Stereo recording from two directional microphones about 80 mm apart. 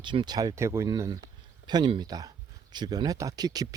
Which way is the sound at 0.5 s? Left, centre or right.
Right.